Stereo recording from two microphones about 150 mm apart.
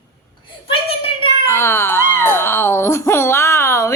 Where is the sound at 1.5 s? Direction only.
15° left (ahead or behind).